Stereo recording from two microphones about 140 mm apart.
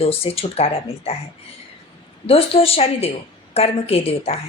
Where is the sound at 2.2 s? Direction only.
45° left (ahead or behind).